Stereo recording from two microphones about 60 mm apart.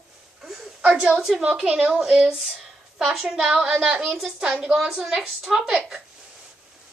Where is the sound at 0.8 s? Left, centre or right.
Centre.